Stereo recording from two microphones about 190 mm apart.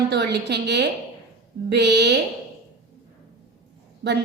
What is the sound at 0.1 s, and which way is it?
A woman's voice, 60° right (ahead or behind).